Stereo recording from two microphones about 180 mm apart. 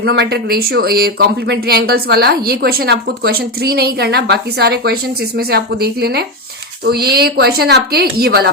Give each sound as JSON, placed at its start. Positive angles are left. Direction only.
{"t": 0.0, "sound": "speech", "side_deg": -65}